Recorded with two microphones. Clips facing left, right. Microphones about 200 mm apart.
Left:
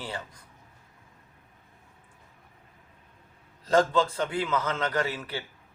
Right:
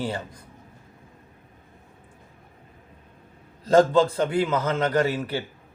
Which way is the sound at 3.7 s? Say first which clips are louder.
Right 6 dB; 40° right (ahead or behind).